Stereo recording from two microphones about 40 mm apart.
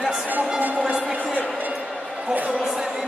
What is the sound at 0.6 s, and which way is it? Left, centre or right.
Music, right.